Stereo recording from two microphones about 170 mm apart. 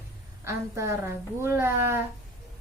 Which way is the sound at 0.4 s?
15° right (ahead or behind).